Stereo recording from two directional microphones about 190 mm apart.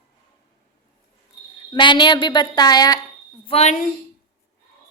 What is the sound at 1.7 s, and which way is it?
Speech, 25° left (ahead or behind).